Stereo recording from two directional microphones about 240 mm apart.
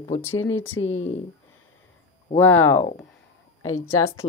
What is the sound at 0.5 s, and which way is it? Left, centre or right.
Speech, centre.